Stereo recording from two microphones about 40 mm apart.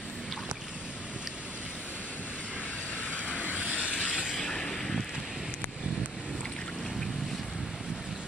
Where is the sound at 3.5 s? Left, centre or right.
Right.